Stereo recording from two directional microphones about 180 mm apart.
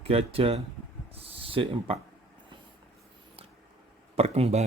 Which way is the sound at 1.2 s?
30° right (ahead or behind).